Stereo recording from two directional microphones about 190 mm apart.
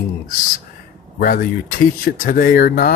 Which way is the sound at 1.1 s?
50° left (ahead or behind).